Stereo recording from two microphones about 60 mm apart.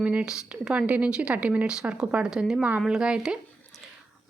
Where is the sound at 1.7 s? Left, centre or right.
Centre.